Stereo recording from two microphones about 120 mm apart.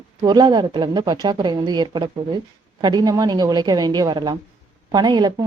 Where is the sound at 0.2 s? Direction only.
35° right (ahead or behind).